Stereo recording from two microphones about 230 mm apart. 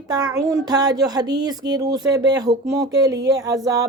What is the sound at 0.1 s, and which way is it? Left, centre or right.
Speech, centre.